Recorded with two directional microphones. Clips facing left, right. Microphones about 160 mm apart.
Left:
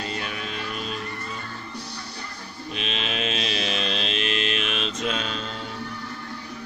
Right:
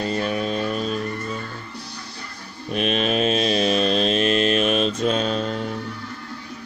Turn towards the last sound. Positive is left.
turn(degrees=-45)  # may be behind; listen again after turning